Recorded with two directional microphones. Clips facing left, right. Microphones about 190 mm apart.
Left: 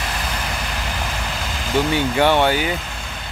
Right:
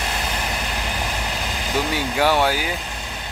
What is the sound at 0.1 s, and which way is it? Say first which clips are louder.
Vehicle: even; 15° right (ahead or behind).